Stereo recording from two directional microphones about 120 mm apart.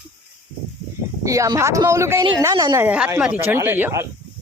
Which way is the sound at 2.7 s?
10° right (ahead or behind).